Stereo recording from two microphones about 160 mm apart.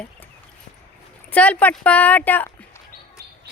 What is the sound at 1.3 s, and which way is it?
Speech, 10° left (ahead or behind).